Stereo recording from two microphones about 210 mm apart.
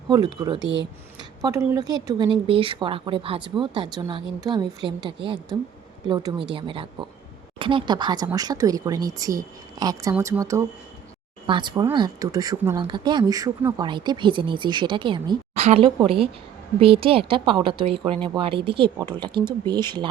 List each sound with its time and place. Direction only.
0.1 s speech: 20° right (ahead or behind)